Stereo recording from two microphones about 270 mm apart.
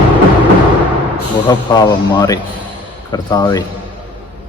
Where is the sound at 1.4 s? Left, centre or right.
Centre.